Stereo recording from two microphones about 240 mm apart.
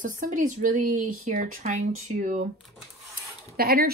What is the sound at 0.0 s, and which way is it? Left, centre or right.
A woman's voice, right.